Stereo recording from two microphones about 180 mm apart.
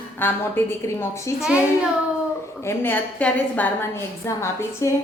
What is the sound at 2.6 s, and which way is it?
A woman's voice, 15° left (ahead or behind).